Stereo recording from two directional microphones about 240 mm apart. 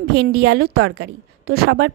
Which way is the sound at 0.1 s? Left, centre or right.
Right.